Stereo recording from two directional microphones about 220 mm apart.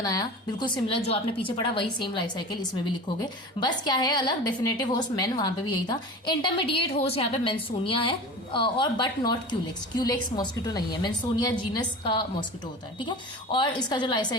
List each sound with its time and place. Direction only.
0.0 s a woman's voice: 15° left (ahead or behind)